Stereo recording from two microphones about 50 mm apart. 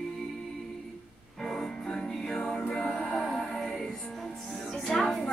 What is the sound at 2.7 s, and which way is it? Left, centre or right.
Music, left.